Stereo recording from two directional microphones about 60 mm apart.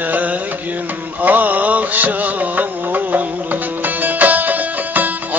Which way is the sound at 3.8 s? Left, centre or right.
Right.